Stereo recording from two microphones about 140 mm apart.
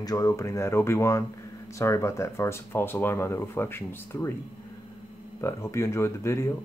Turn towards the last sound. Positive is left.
turn(degrees=20)  # may be behind; listen again after turning